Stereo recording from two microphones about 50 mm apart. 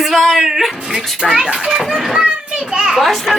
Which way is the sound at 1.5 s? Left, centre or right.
Centre.